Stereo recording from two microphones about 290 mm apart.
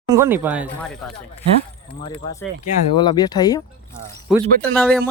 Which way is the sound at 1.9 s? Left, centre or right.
Centre.